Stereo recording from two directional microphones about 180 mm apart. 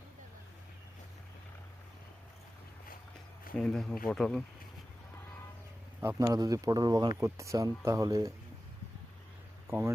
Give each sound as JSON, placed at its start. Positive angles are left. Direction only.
{"t": 3.6, "sound": "speech", "side_deg": 5}
{"t": 6.0, "sound": "speech", "side_deg": -15}
{"t": 9.6, "sound": "speech", "side_deg": -15}